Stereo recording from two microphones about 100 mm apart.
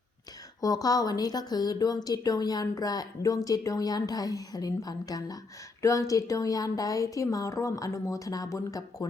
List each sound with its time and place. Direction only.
0.6 s a woman's voice: 40° left (ahead or behind)